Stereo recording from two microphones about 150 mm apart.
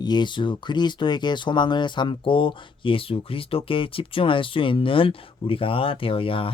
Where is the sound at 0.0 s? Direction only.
30° left (ahead or behind).